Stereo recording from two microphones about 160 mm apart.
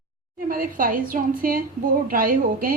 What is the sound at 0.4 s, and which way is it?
A woman's voice, 60° right (ahead or behind).